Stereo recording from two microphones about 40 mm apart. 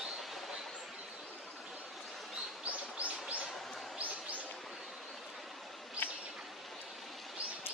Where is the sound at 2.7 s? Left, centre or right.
Right.